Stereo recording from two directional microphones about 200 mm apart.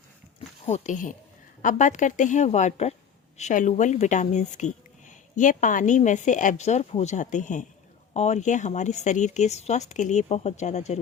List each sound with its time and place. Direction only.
0.6 s speech: 35° left (ahead or behind)